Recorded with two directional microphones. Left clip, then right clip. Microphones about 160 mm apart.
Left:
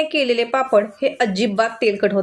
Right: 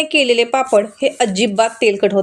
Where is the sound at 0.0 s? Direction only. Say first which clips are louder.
Right 5 dB; 20° right (ahead or behind).